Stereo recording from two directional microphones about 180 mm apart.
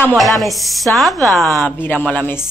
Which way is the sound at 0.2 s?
Centre (ahead or behind).